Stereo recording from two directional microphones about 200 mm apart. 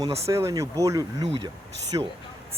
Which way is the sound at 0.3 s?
15° right (ahead or behind).